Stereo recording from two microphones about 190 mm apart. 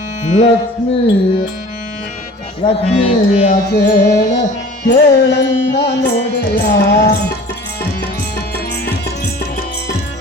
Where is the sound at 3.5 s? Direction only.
55° left (ahead or behind).